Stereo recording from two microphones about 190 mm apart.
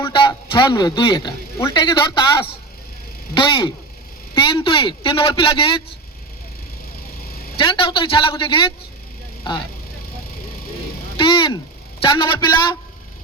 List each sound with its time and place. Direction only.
0.1 s a man's voice: 25° left (ahead or behind)
3.3 s a man's voice: 25° left (ahead or behind)
7.6 s a man's voice: 25° left (ahead or behind)
11.2 s a man's voice: 25° left (ahead or behind)